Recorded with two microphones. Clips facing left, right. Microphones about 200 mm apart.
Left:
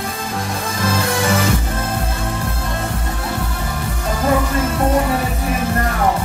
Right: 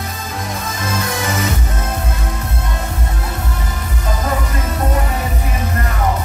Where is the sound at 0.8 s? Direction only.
30° left (ahead or behind).